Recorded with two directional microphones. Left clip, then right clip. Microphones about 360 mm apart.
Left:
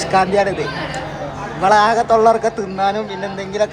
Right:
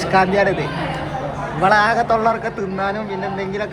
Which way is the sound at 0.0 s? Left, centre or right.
Centre.